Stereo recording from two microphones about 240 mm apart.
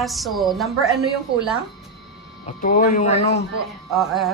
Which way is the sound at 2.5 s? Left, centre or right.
Left.